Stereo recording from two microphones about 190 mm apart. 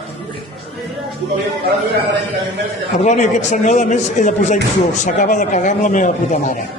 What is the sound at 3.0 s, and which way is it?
Speech, 40° left (ahead or behind).